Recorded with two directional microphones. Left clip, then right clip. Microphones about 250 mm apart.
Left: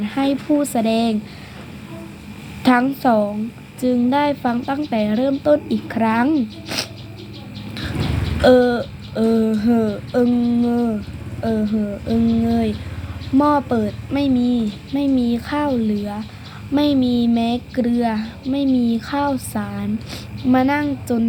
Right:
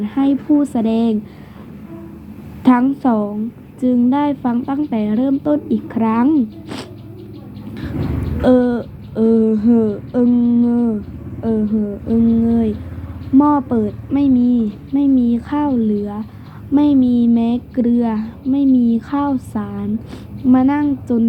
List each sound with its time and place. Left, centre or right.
0.0 s a woman's voice: centre
2.6 s a woman's voice: centre
7.7 s vehicle: centre
8.4 s a woman's voice: centre
10.7 s humming: left
12.0 s a woman's voice: centre
13.3 s humming: centre
13.6 s a woman's voice: centre